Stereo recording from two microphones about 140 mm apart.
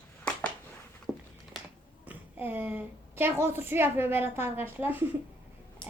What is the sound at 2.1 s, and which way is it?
A woman's voice, 10° right (ahead or behind).